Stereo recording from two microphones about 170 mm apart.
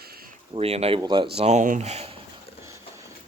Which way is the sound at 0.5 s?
35° right (ahead or behind).